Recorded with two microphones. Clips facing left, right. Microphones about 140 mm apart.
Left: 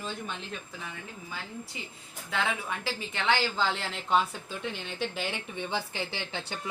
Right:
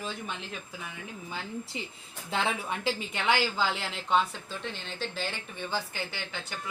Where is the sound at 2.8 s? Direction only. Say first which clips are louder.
Right 1 dB; 15° right (ahead or behind).